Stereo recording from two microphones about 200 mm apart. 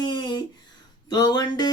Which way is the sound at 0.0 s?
20° left (ahead or behind).